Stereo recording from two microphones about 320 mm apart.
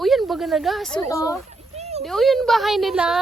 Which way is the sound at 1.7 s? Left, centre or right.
Centre.